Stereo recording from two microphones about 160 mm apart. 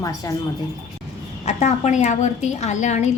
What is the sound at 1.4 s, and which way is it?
A woman's voice, 45° left (ahead or behind).